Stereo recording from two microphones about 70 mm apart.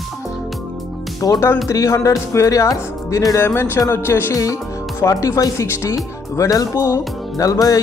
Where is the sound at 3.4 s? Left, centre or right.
Left.